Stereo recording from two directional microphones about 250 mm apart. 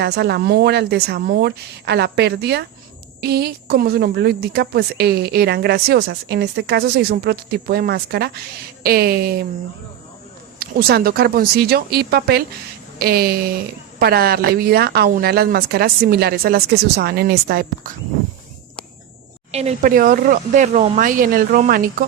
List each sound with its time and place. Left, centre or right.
0.0 s speech: right
10.6 s speech: right
19.5 s speech: right